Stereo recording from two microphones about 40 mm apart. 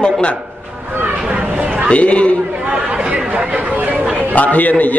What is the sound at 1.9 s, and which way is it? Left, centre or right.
Speech, left.